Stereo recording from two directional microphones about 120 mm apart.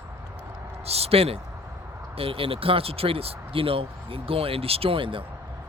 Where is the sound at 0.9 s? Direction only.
60° right (ahead or behind).